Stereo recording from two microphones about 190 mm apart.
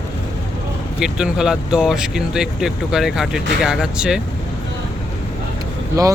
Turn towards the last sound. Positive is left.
turn(degrees=-15)  # may be behind; listen again after turning